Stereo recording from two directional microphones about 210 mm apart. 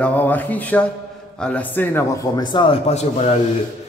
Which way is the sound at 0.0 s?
10° left (ahead or behind).